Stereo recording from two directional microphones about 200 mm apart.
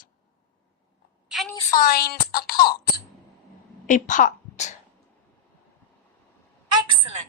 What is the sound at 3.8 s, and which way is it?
Speech, 40° left (ahead or behind).